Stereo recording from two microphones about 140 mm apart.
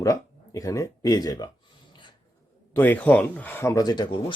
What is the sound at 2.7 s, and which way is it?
Speech, 15° left (ahead or behind).